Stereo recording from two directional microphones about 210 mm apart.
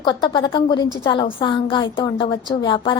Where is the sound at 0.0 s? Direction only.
20° left (ahead or behind).